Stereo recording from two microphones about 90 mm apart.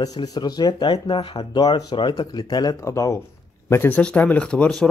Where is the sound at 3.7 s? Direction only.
20° left (ahead or behind).